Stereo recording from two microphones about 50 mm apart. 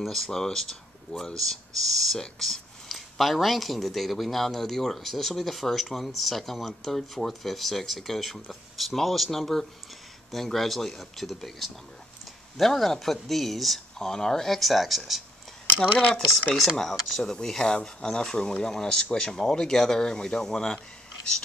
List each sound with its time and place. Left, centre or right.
0.0 s speech: centre
2.4 s speech: centre
16.7 s speech: centre